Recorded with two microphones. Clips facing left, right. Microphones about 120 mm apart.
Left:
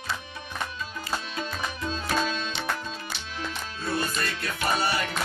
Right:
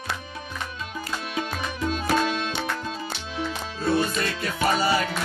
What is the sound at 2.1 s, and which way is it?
Music, 70° right (ahead or behind).